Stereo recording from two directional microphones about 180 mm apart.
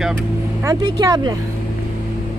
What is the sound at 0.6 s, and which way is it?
Speech, 20° right (ahead or behind).